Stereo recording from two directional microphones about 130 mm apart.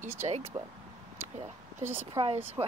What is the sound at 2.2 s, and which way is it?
Speech, 30° right (ahead or behind).